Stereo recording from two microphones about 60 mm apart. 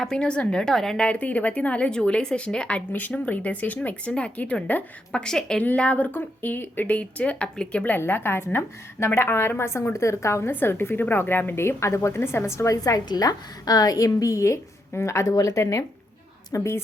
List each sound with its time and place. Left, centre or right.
0.0 s a woman's voice: centre
1.0 s a woman's voice: left
5.6 s speech: left
7.9 s a woman's voice: left
10.5 s a woman's voice: left
11.8 s a woman's voice: left
12.7 s a woman's voice: left
16.6 s a woman's voice: left